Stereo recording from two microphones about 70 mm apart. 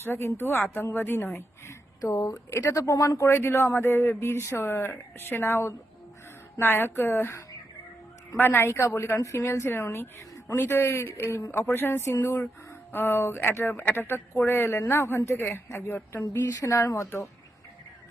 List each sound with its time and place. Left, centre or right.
0.0 s a woman's voice: left
2.5 s speech: left
3.2 s a woman's voice: left
9.1 s speech: left
9.6 s a woman's voice: left
16.3 s speech: left
16.9 s a woman's voice: left